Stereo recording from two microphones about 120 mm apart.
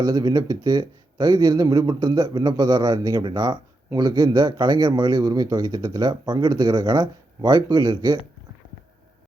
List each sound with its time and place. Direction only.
0.0 s a man's voice: 35° right (ahead or behind)